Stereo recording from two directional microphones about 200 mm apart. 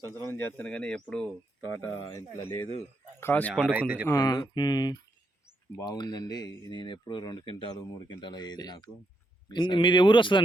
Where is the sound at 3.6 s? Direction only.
5° right (ahead or behind).